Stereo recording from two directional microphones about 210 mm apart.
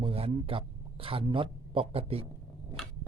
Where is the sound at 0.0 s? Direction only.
25° right (ahead or behind).